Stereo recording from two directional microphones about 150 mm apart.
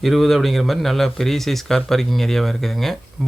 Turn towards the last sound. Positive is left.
turn(degrees=0)  # may be behind; listen again after turning